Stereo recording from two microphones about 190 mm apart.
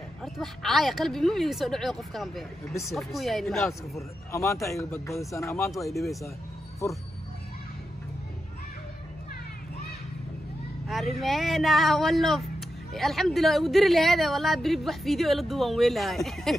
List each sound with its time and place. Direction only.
0.2 s speech: centre (ahead or behind)
4.3 s speech: 15° left (ahead or behind)
5.9 s speech: centre (ahead or behind)
6.8 s speech: 15° left (ahead or behind)
10.9 s speech: centre (ahead or behind)